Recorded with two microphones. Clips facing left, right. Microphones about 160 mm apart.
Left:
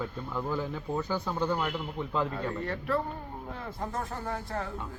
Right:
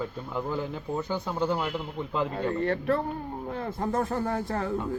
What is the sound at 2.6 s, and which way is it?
Speech, 55° right (ahead or behind).